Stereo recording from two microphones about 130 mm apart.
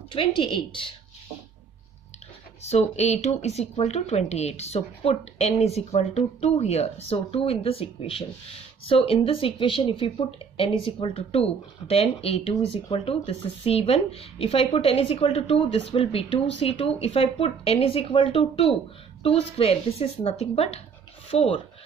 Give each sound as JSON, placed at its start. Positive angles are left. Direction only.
{"t": 0.1, "sound": "speech", "side_deg": 40}
{"t": 2.6, "sound": "speech", "side_deg": 55}